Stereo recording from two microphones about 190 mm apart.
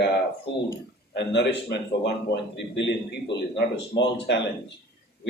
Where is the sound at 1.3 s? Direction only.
65° left (ahead or behind).